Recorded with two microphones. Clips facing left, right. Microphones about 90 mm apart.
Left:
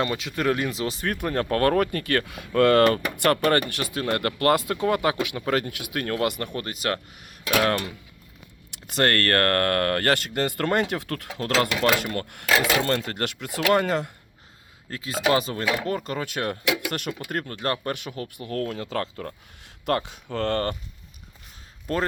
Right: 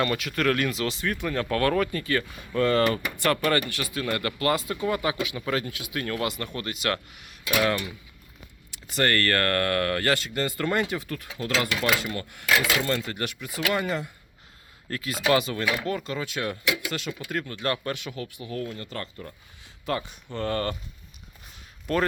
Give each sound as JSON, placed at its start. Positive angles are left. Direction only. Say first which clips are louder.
{"t": 0.0, "sound": "speech", "louder": "even", "side_deg": 20}
{"t": 0.9, "sound": "speech", "louder": "left 2 dB", "side_deg": 50}
{"t": 6.2, "sound": "speech", "louder": "left 4 dB", "side_deg": 60}
{"t": 6.6, "sound": "speech", "louder": "right 1 dB", "side_deg": 40}
{"t": 8.7, "sound": "speech", "louder": "left 2 dB", "side_deg": 65}
{"t": 11.7, "sound": "speech", "louder": "left 3 dB", "side_deg": 45}
{"t": 11.9, "sound": "speech", "louder": "left 3 dB", "side_deg": 55}
{"t": 12.5, "sound": "speech", "louder": "left 2 dB", "side_deg": 30}
{"t": 12.8, "sound": "speech", "louder": "left 3 dB", "side_deg": 60}
{"t": 14.8, "sound": "speech", "louder": "right 2 dB", "side_deg": 20}
{"t": 15.3, "sound": "speech", "louder": "even", "side_deg": 35}
{"t": 17.2, "sound": "speech", "louder": "even", "side_deg": 45}
{"t": 20.3, "sound": "speech", "louder": "left 3 dB", "side_deg": 90}
{"t": 21.9, "sound": "speech", "louder": "right 1 dB", "side_deg": 30}